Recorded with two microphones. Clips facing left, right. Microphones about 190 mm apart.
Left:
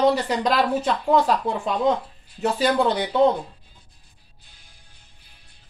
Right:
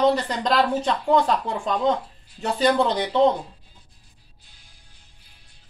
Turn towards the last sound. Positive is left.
turn(degrees=55)  # may be behind; listen again after turning